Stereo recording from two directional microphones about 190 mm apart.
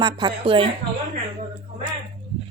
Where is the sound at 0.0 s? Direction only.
25° right (ahead or behind).